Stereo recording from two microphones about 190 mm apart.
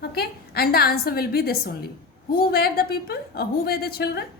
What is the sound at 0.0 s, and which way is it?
A woman's voice, 55° left (ahead or behind).